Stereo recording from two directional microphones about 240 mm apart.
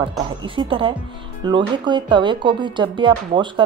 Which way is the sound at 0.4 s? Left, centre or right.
Right.